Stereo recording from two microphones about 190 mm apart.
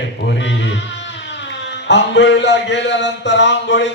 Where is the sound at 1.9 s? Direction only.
65° left (ahead or behind).